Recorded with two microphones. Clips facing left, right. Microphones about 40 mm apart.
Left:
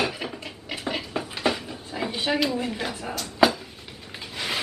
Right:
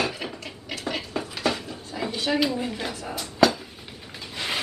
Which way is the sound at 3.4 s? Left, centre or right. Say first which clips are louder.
Even; centre.